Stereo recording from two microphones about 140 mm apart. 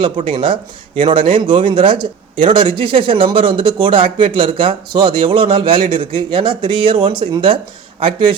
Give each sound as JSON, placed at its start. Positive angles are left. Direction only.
{"t": 0.0, "sound": "speech", "side_deg": -35}